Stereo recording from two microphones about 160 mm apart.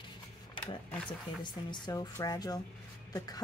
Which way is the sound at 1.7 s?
25° left (ahead or behind).